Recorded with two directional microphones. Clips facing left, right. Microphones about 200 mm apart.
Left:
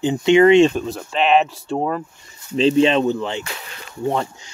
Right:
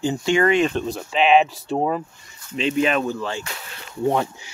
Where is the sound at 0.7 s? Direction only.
Centre (ahead or behind).